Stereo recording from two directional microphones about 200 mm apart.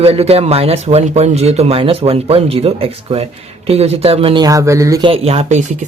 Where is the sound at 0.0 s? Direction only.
30° right (ahead or behind).